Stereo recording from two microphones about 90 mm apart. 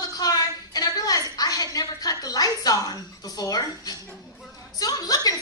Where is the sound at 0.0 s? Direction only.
45° left (ahead or behind).